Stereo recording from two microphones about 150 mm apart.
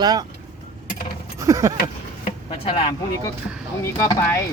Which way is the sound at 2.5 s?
35° left (ahead or behind).